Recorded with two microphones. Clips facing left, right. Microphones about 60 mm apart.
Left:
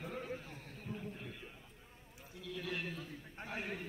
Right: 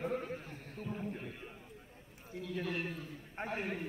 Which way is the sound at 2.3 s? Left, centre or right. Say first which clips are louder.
Right 4 dB; right.